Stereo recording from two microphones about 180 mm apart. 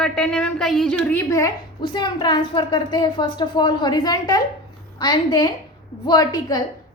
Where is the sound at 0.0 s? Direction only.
5° left (ahead or behind).